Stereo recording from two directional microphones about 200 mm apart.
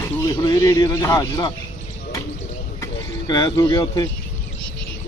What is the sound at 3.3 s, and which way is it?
Speech, 20° left (ahead or behind).